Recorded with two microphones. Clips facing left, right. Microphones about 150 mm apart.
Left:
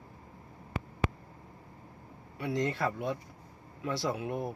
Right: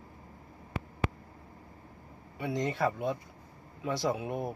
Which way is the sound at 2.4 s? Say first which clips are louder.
Right 1 dB; 20° right (ahead or behind).